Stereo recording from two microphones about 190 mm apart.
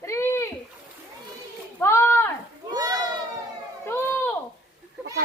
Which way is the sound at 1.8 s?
15° left (ahead or behind).